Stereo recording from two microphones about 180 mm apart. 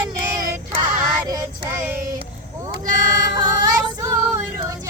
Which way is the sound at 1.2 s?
20° right (ahead or behind).